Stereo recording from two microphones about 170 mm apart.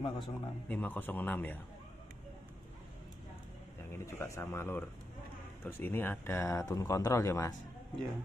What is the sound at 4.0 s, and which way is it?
Speech, 15° left (ahead or behind).